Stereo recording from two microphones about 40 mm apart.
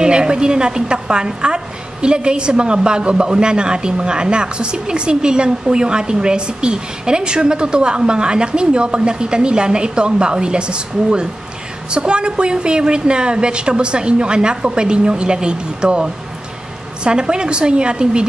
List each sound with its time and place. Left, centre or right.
0.0 s a woman's voice: right